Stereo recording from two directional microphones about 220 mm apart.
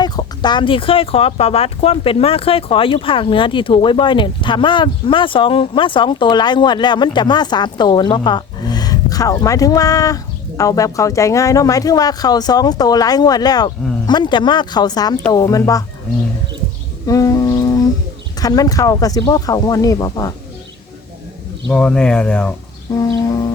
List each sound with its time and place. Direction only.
0.0 s speech: 20° left (ahead or behind)
17.1 s music: 15° left (ahead or behind)
18.3 s speech: 15° left (ahead or behind)
21.7 s speech: 5° left (ahead or behind)